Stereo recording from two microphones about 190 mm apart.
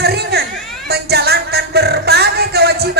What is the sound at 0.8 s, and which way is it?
Music, 60° right (ahead or behind).